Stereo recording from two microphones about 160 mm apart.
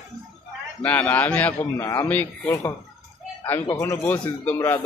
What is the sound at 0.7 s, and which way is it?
A man's voice, 10° left (ahead or behind).